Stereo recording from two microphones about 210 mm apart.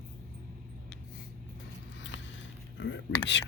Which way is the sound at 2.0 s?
60° left (ahead or behind).